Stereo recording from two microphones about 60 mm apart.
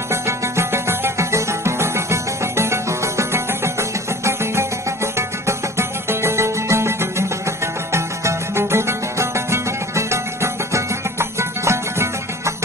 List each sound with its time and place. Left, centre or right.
0.1 s music: right